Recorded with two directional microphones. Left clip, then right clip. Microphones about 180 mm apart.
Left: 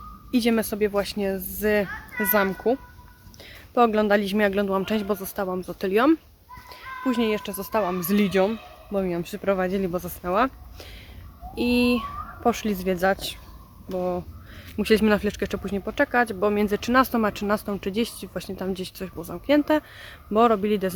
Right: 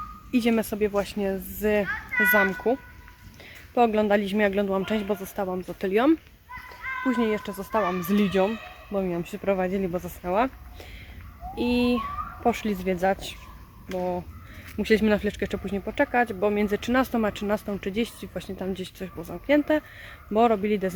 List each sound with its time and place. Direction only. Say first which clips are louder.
0.3 s speech: left 2 dB; centre (ahead or behind)
1.9 s a child's voice: right 6 dB; 15° left (ahead or behind)
2.3 s speech: left 3 dB; 5° left (ahead or behind)
3.8 s speech: left 2 dB; 5° left (ahead or behind)